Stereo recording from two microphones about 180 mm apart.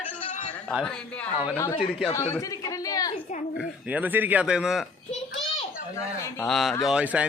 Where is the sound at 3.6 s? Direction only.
5° right (ahead or behind).